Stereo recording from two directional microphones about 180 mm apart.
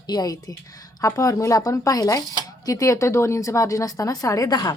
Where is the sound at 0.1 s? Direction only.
20° left (ahead or behind).